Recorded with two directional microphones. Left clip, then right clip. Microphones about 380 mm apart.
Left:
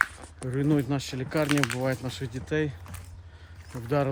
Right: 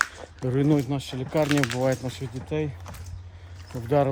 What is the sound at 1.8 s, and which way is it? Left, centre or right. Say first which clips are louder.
Speech: right 4 dB; centre.